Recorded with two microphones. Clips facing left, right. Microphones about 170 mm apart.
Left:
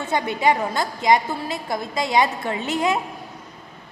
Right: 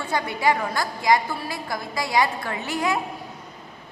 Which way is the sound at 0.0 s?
20° left (ahead or behind).